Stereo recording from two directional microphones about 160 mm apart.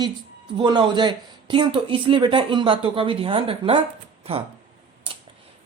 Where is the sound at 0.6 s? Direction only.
25° right (ahead or behind).